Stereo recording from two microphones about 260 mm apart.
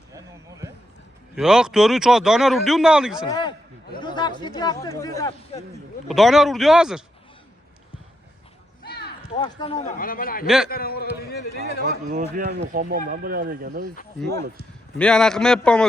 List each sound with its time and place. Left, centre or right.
0.1 s a sound: centre
1.4 s speech: centre
3.2 s a man's voice: centre
6.1 s speech: centre
8.8 s a sound: left
9.4 s speech: centre
9.8 s speech: left
10.4 s speech: centre
10.7 s speech: left
11.2 s a sound: left
12.1 s speech: right
14.9 s speech: centre